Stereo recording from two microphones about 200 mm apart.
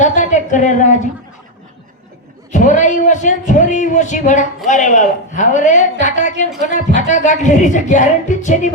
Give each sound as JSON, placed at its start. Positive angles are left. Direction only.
{"t": 0.0, "sound": "speech", "side_deg": 40}
{"t": 2.5, "sound": "speech", "side_deg": 40}